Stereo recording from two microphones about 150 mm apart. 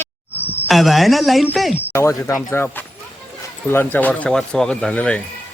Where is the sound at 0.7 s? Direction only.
Centre (ahead or behind).